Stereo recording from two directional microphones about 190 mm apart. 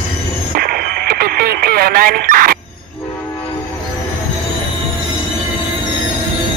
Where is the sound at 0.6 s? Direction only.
50° right (ahead or behind).